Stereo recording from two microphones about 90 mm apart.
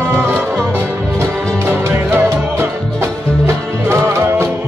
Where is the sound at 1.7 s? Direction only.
25° right (ahead or behind).